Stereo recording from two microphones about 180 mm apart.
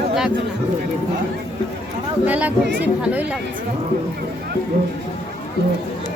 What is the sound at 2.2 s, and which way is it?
Speech, 10° right (ahead or behind).